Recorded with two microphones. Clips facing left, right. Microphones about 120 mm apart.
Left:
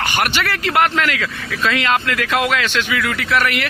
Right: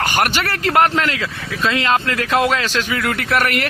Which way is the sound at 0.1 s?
40° right (ahead or behind).